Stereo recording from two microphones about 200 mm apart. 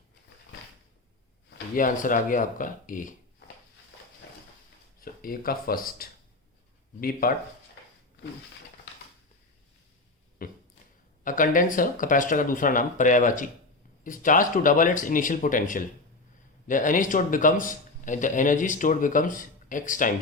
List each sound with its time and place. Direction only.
1.7 s a man's voice: 40° left (ahead or behind)
4.9 s speech: 45° left (ahead or behind)
10.4 s a man's voice: 45° left (ahead or behind)